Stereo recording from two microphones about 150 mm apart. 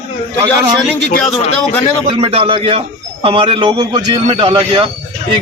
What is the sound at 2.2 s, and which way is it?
A man's voice, 40° right (ahead or behind).